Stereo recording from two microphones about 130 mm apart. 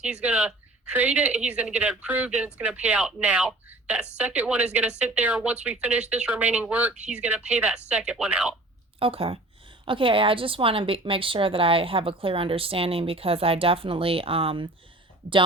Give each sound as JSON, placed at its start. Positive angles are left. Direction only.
{"t": 0.0, "sound": "speech", "side_deg": -10}
{"t": 9.0, "sound": "a woman's voice", "side_deg": -45}